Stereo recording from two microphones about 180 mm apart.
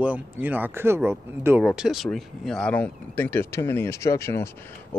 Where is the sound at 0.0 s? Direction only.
10° right (ahead or behind).